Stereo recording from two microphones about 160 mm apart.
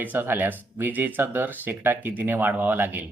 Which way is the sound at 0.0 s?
10° right (ahead or behind).